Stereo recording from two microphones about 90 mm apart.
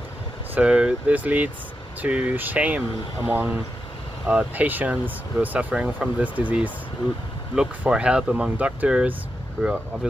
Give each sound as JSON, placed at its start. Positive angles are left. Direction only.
{"t": 0.6, "sound": "speech", "side_deg": -10}